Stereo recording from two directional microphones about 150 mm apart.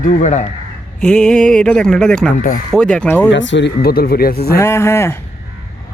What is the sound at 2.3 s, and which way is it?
Speech, 65° left (ahead or behind).